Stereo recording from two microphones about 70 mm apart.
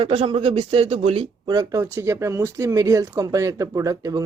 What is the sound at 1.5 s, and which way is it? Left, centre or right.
Speech, right.